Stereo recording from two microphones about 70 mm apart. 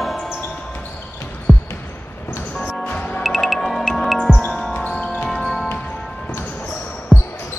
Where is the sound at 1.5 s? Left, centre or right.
Centre.